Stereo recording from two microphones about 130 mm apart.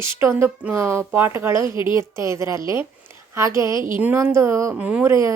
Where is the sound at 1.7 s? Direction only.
40° left (ahead or behind).